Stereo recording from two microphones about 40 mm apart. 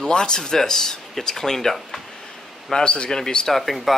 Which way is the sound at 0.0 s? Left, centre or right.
Centre.